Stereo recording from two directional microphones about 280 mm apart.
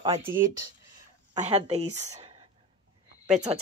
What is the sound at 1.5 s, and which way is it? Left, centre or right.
Speech, right.